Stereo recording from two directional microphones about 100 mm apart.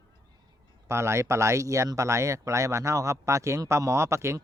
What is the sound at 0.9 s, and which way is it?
Speech, 30° right (ahead or behind).